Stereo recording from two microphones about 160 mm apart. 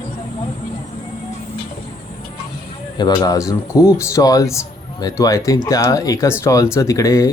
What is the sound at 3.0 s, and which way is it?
Speech, 25° left (ahead or behind).